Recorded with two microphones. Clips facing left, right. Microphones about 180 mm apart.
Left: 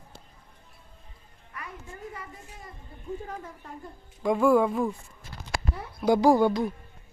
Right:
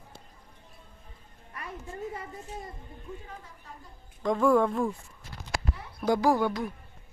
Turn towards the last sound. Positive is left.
turn(degrees=20)  # may be behind; listen again after turning